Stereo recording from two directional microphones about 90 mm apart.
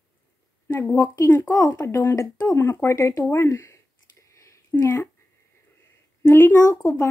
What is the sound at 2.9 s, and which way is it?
Speech, 35° left (ahead or behind).